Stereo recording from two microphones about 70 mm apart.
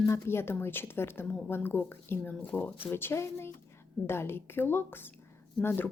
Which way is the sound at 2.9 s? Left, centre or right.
Left.